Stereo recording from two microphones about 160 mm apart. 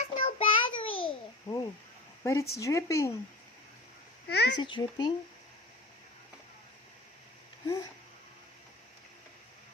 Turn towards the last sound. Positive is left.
turn(degrees=25)  # may be behind; listen again after turning